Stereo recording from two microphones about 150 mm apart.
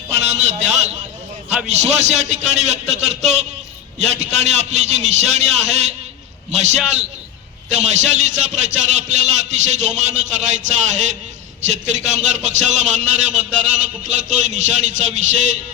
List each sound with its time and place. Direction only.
0.1 s a man's voice: 50° right (ahead or behind)